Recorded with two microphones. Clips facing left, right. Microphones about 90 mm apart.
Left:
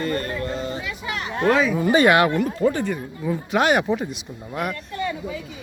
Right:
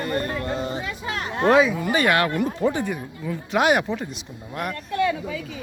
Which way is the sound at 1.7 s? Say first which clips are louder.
Left 4 dB; 25° left (ahead or behind).